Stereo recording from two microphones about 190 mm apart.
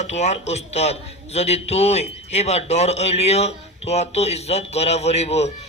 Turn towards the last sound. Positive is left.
turn(degrees=35)  # may be behind; listen again after turning